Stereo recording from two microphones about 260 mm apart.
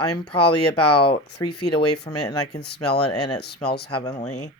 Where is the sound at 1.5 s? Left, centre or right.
Left.